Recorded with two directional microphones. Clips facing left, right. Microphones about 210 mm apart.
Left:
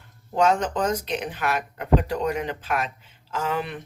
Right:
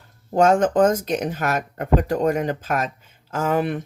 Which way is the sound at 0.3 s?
50° right (ahead or behind).